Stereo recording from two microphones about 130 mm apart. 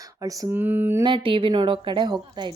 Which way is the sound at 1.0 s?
40° right (ahead or behind).